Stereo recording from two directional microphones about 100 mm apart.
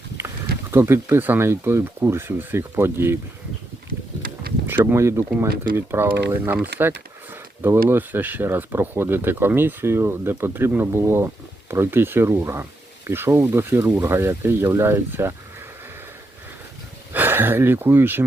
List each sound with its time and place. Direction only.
0.7 s speech: 25° right (ahead or behind)
4.6 s speech: 20° right (ahead or behind)
17.1 s speech: 20° right (ahead or behind)